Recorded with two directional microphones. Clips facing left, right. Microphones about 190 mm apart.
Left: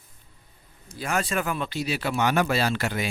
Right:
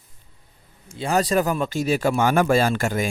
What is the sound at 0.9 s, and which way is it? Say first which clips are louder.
Speech: right 7 dB; 30° right (ahead or behind).